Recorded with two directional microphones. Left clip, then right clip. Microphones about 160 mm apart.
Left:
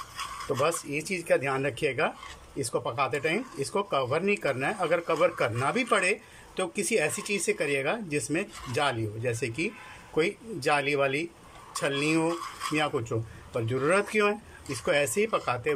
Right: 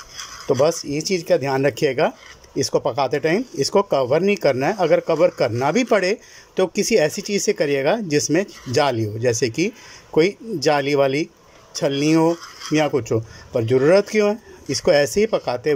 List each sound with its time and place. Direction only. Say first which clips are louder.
0.5 s speech: right 10 dB; 35° right (ahead or behind)